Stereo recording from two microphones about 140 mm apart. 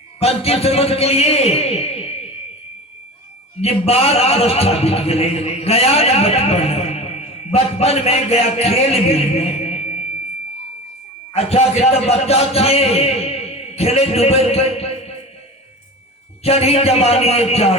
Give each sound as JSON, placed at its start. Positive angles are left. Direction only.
{"t": 0.2, "sound": "a man's voice", "side_deg": 45}
{"t": 3.6, "sound": "a man's voice", "side_deg": 45}
{"t": 11.3, "sound": "a man's voice", "side_deg": 45}
{"t": 16.4, "sound": "a man's voice", "side_deg": 45}